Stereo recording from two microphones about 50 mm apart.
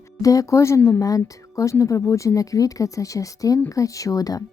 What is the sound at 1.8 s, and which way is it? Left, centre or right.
Speech, left.